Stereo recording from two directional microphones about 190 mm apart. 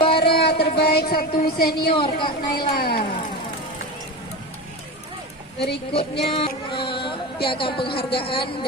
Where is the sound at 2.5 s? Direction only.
55° left (ahead or behind).